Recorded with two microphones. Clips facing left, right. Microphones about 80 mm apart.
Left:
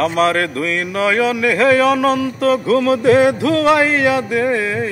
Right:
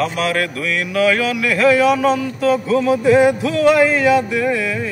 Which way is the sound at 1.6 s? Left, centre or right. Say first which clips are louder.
Right 1 dB; left.